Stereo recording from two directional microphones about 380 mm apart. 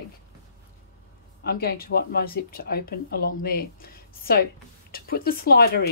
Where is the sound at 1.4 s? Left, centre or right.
Left.